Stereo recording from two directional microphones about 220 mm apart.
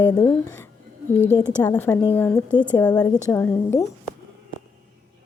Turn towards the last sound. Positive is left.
turn(degrees=10)  # may be behind; listen again after turning